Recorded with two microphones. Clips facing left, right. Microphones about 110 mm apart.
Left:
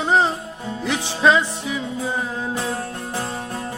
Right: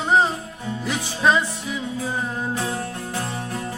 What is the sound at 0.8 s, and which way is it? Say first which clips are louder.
Music: left 3 dB; 75° left (ahead or behind).